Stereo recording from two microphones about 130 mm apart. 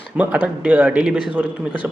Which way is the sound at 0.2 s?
10° right (ahead or behind).